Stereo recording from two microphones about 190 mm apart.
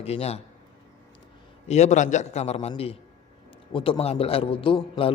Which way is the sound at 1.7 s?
35° left (ahead or behind).